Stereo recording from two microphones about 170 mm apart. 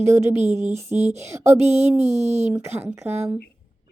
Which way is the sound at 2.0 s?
40° right (ahead or behind).